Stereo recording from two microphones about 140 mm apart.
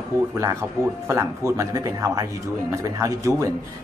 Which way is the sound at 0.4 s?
20° right (ahead or behind).